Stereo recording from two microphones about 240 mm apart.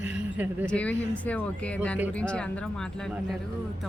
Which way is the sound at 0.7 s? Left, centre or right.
Centre.